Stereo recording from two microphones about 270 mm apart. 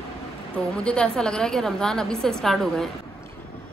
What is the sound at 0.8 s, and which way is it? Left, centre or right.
A woman's voice, centre.